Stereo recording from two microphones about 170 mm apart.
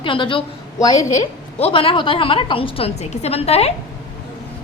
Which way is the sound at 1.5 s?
35° left (ahead or behind).